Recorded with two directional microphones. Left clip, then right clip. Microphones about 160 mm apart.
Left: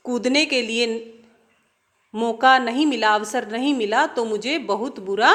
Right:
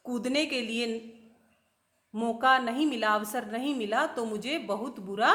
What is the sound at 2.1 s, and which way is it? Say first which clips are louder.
A woman's voice: left 8 dB; 15° left (ahead or behind).